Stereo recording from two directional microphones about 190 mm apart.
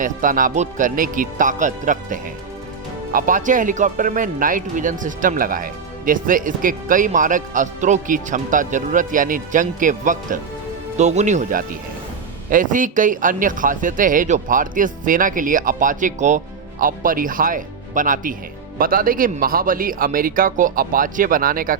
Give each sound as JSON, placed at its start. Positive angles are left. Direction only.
{"t": 0.0, "sound": "speech", "side_deg": -45}